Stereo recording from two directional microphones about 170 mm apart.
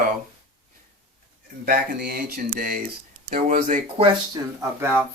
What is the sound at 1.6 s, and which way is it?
Speech, 60° right (ahead or behind).